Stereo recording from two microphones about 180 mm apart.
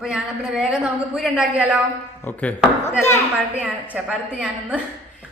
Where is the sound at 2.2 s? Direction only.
10° left (ahead or behind).